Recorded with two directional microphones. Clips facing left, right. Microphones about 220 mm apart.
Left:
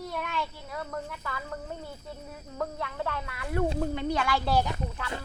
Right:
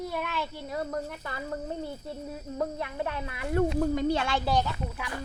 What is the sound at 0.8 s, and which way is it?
Speech, 35° right (ahead or behind).